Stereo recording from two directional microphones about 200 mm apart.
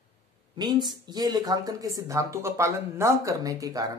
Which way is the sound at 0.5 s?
20° right (ahead or behind).